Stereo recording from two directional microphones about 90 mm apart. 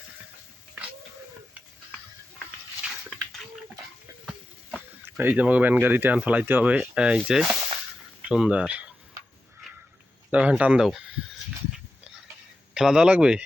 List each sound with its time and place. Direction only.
5.0 s speech: 20° right (ahead or behind)
10.3 s speech: 15° right (ahead or behind)
12.7 s speech: 10° right (ahead or behind)